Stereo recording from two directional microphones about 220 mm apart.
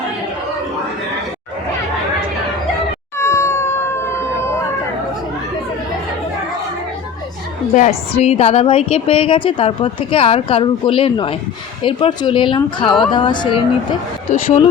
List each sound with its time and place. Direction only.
3.2 s cat: 10° left (ahead or behind)
7.7 s a woman's voice: 30° left (ahead or behind)
14.3 s speech: 40° left (ahead or behind)